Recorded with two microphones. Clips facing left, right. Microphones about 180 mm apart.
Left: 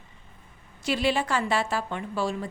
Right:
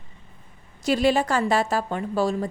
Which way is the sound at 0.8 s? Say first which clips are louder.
Right 5 dB; 45° right (ahead or behind).